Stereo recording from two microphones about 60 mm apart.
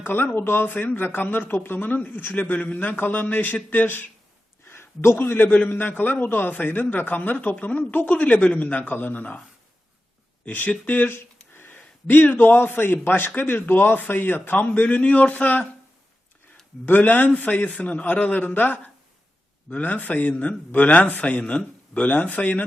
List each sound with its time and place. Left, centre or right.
0.0 s speech: left
4.7 s a sound: left
5.2 s a man's voice: left
10.4 s a man's voice: left
16.8 s a man's voice: left